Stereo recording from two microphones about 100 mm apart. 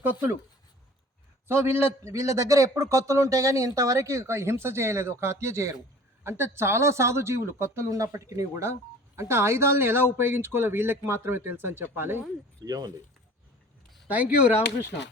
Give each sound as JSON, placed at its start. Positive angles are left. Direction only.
{"t": 1.5, "sound": "a man's voice", "side_deg": -25}
{"t": 12.6, "sound": "speech", "side_deg": -40}
{"t": 14.1, "sound": "speech", "side_deg": -15}